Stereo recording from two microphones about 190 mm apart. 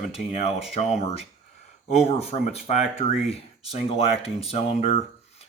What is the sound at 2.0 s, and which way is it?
Speech, 35° left (ahead or behind).